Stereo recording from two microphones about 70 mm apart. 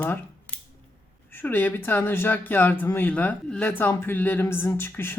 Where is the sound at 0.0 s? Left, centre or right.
Left.